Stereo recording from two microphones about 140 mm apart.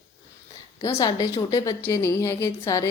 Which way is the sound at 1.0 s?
25° left (ahead or behind).